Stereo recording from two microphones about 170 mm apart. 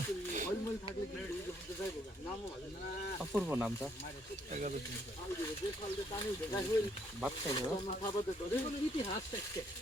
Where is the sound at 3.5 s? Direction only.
10° right (ahead or behind).